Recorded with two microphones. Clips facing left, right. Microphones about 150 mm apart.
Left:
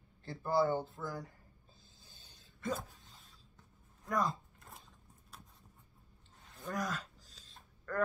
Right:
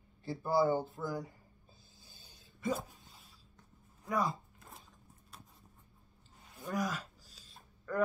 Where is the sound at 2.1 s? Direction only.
10° right (ahead or behind).